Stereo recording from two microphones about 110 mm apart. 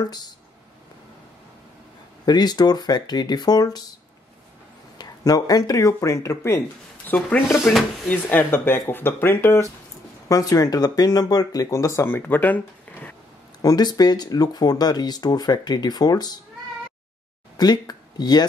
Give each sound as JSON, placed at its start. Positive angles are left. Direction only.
{"t": 0.0, "sound": "speech", "side_deg": 40}
{"t": 2.2, "sound": "speech", "side_deg": 40}
{"t": 4.9, "sound": "speech", "side_deg": 35}
{"t": 7.1, "sound": "speech", "side_deg": 15}
{"t": 13.6, "sound": "speech", "side_deg": 35}
{"t": 17.6, "sound": "speech", "side_deg": 40}